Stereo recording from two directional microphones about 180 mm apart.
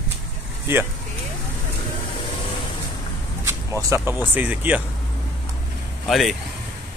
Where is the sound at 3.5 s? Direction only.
15° right (ahead or behind).